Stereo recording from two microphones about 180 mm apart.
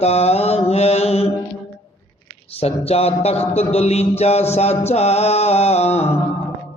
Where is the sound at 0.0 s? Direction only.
35° left (ahead or behind).